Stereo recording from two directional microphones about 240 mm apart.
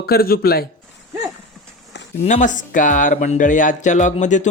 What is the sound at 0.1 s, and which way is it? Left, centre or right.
Speech, left.